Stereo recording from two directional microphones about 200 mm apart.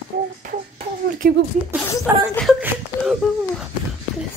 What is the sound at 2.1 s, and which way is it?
Speech, 10° right (ahead or behind).